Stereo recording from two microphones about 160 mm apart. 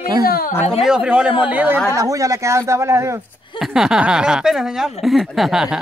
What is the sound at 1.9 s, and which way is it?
Speech, 20° right (ahead or behind).